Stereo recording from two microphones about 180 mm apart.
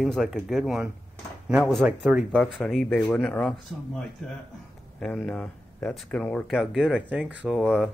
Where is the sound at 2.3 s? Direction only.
5° left (ahead or behind).